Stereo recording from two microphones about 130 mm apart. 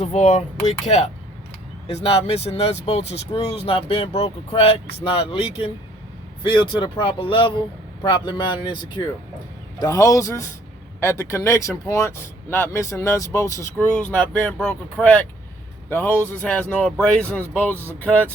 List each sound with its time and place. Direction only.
0.0 s speech: 60° left (ahead or behind); by 8.8 s 35° left (ahead or behind)
9.7 s speech: 25° left (ahead or behind); by 18.3 s 10° left (ahead or behind)